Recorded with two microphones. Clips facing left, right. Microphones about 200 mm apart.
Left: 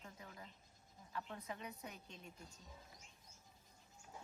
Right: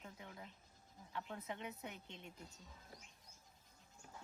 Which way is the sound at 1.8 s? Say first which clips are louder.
Right 2 dB; 25° right (ahead or behind).